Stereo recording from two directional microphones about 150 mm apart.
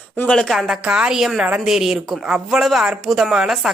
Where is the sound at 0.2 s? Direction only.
5° left (ahead or behind).